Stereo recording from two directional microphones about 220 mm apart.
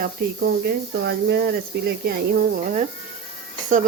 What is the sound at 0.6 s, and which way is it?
Speech, 50° right (ahead or behind).